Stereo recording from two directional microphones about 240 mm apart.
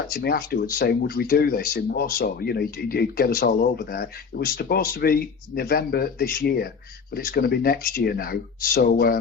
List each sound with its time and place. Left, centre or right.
0.1 s speech: left